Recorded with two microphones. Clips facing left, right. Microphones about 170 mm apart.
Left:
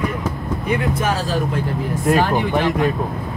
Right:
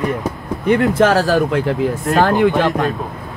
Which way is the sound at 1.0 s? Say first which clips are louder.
Right 8 dB; 85° right.